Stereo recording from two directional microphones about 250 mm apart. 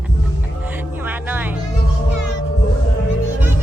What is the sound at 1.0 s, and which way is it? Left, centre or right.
Music, centre.